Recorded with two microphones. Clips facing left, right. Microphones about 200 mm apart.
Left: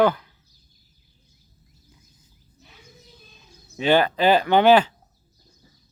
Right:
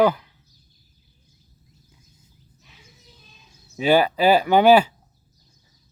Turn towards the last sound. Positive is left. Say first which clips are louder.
# right 1 dB
turn(degrees=-10)  # may be behind; listen again after turning